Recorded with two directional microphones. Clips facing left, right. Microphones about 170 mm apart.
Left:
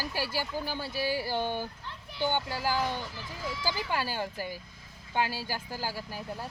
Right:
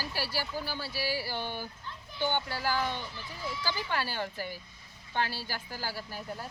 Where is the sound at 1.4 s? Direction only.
45° left (ahead or behind).